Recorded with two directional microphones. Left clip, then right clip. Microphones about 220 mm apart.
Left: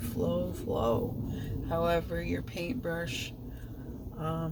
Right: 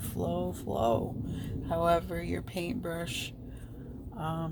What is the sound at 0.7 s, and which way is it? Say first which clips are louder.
A man's voice: right 1 dB; 40° right (ahead or behind).